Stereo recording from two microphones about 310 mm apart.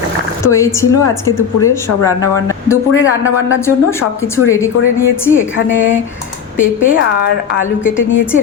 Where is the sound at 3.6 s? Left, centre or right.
Centre.